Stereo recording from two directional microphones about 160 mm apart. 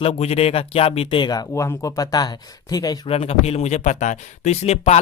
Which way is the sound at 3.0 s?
40° left (ahead or behind).